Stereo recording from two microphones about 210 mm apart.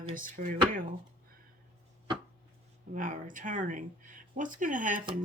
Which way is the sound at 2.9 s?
40° right (ahead or behind).